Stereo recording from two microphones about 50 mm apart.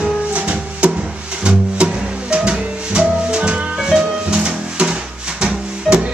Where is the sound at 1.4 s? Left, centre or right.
Right.